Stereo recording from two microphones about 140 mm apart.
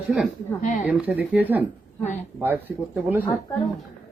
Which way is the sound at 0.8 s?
10° right (ahead or behind).